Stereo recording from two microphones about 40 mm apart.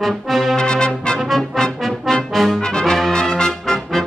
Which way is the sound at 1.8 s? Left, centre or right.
Centre.